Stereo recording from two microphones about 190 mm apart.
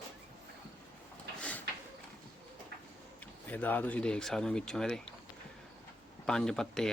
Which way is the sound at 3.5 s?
10° left (ahead or behind).